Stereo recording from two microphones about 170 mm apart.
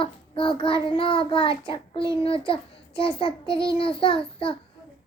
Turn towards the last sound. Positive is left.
turn(degrees=30)  # may be behind; listen again after turning